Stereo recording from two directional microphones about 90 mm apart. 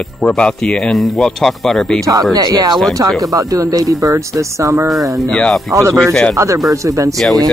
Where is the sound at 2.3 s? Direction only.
45° right (ahead or behind).